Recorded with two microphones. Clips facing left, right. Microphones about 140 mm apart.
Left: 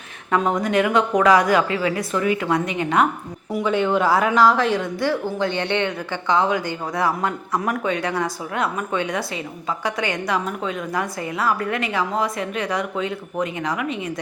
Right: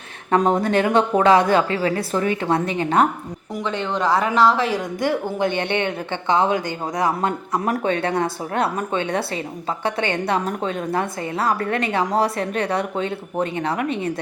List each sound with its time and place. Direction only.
0.3 s a woman's voice: 35° right (ahead or behind)
3.5 s a woman's voice: 10° left (ahead or behind)
4.8 s a woman's voice: 20° right (ahead or behind); by 14.1 s 35° right (ahead or behind)